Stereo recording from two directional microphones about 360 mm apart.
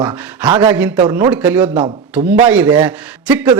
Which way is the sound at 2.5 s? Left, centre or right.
Centre.